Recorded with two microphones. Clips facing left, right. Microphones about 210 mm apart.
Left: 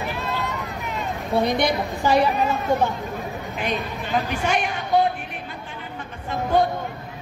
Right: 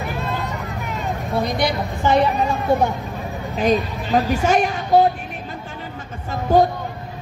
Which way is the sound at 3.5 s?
40° right (ahead or behind).